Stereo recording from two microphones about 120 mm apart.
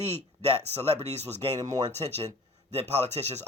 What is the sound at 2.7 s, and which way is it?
Speech, 65° right (ahead or behind).